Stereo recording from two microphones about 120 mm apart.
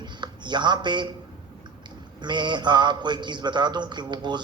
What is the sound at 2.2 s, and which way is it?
A man's voice, 40° right (ahead or behind).